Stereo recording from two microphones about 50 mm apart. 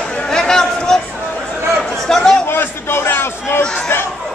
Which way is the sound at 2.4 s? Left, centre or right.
Left.